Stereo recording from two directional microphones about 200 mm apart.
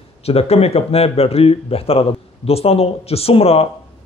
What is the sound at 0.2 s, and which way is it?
A man's voice, 30° left (ahead or behind).